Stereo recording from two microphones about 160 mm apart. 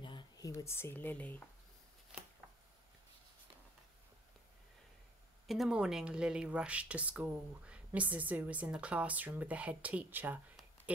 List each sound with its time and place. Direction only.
0.0 s speech: 30° left (ahead or behind); by 1.4 s 10° left (ahead or behind)
5.5 s speech: 5° right (ahead or behind)